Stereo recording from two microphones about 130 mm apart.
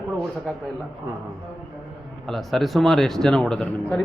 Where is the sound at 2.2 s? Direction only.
Centre (ahead or behind).